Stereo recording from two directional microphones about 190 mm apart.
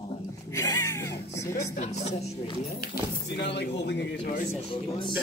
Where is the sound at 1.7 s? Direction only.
35° left (ahead or behind).